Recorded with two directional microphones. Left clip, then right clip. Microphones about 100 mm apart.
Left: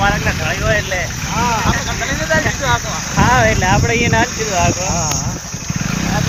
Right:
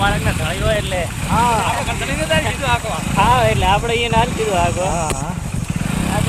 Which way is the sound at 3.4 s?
25° right (ahead or behind).